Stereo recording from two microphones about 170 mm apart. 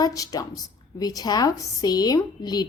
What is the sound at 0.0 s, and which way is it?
A woman's voice, 20° left (ahead or behind).